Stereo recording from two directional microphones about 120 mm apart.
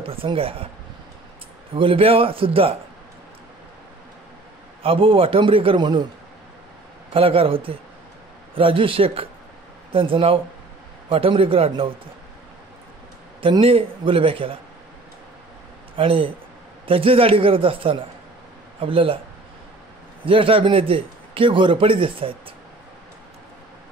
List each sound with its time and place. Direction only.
0.0 s speech: 50° right (ahead or behind)
1.8 s a man's voice: 50° right (ahead or behind)
4.8 s a man's voice: 50° right (ahead or behind)
7.1 s a man's voice: 50° right (ahead or behind)
13.4 s a man's voice: 50° right (ahead or behind)
16.0 s a man's voice: 50° right (ahead or behind)
20.2 s a man's voice: 50° right (ahead or behind)